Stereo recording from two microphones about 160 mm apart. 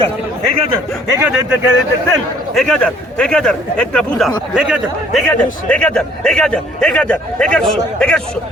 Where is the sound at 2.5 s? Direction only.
5° left (ahead or behind).